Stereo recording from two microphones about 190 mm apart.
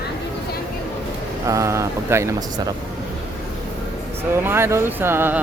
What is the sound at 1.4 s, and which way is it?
Speech, 15° right (ahead or behind).